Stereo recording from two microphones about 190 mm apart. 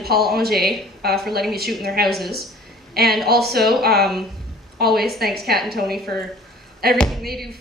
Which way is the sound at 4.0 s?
Centre (ahead or behind).